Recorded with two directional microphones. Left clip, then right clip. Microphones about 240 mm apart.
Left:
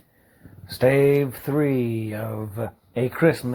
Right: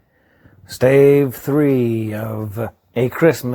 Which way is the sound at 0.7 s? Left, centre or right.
Right.